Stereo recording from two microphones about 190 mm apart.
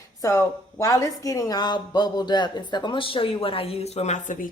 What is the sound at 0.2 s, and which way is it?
Speech, 15° left (ahead or behind).